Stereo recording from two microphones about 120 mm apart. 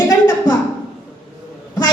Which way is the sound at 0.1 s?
35° left (ahead or behind).